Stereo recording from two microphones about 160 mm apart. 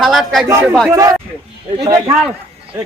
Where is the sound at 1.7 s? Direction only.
30° right (ahead or behind).